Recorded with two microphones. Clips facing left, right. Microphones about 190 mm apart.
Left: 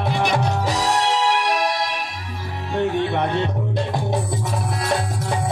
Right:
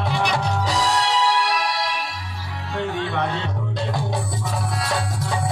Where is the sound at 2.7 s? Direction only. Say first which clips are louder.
Left 4 dB; 20° left (ahead or behind).